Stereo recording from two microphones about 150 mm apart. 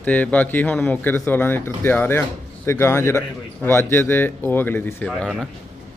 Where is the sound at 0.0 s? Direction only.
10° left (ahead or behind).